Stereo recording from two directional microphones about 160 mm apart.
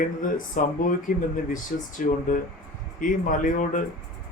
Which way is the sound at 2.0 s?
55° left (ahead or behind).